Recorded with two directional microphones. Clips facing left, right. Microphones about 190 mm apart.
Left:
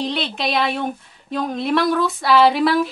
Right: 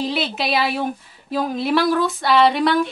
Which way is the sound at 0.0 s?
5° right (ahead or behind).